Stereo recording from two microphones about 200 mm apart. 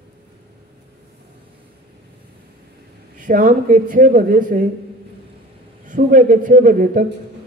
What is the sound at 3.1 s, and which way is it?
Speech, 40° right (ahead or behind).